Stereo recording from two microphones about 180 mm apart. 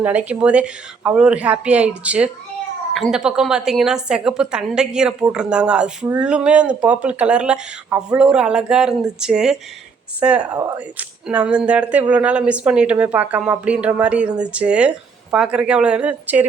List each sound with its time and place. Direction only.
0.0 s speech: 10° right (ahead or behind)